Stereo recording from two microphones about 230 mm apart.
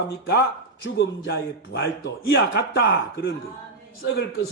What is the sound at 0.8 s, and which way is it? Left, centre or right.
A man's voice, left.